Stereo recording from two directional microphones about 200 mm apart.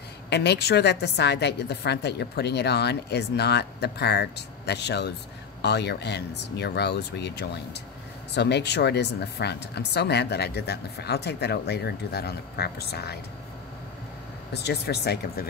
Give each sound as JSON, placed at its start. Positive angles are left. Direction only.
{"t": 0.3, "sound": "a woman's voice", "side_deg": 55}
{"t": 14.5, "sound": "a woman's voice", "side_deg": 55}